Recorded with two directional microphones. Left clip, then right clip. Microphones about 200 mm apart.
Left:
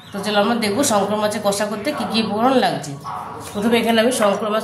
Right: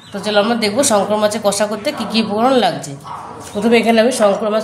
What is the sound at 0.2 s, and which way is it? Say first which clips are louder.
Speech: right 3 dB; 25° right (ahead or behind).